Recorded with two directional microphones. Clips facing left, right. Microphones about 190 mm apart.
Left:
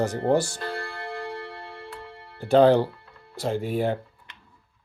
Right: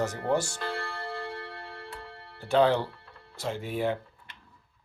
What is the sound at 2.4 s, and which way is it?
Speech, 35° left (ahead or behind).